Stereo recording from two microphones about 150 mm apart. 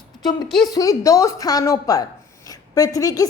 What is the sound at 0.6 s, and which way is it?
A woman's voice, 25° left (ahead or behind).